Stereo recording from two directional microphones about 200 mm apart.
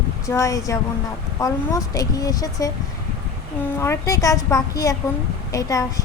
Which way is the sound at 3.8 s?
15° left (ahead or behind).